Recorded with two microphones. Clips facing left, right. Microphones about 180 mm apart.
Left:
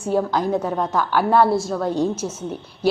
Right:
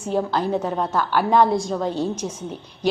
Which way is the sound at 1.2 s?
10° left (ahead or behind).